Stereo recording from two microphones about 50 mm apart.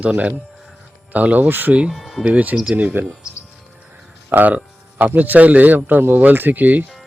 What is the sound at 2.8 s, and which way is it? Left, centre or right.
Speech, right.